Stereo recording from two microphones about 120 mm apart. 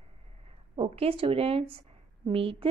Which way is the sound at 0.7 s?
55° right (ahead or behind).